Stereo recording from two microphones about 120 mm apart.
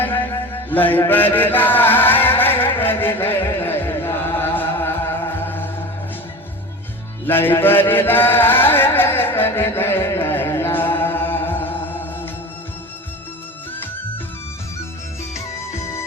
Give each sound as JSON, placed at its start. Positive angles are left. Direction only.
{"t": 0.7, "sound": "chant", "side_deg": 15}
{"t": 7.3, "sound": "chant", "side_deg": 20}
{"t": 15.4, "sound": "music", "side_deg": 25}